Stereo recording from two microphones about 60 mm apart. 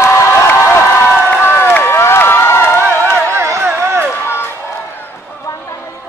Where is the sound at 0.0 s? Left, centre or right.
Left.